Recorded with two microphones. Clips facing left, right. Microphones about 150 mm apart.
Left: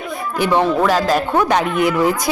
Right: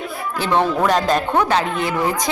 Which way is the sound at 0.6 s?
Centre (ahead or behind).